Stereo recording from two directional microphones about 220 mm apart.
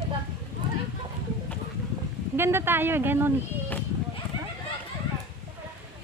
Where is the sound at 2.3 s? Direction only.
10° right (ahead or behind).